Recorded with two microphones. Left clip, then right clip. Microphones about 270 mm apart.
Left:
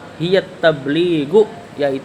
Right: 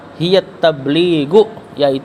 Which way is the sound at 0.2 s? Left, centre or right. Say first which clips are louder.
Right 3 dB; right.